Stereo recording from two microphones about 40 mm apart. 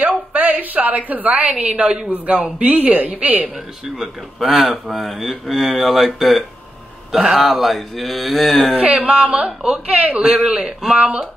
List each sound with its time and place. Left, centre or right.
0.0 s a sound: right
1.6 s a woman's voice: right
4.4 s a man's voice: centre
8.7 s a woman's voice: right